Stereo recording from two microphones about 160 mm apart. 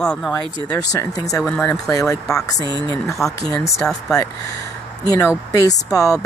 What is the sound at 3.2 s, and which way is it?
Speech, centre (ahead or behind).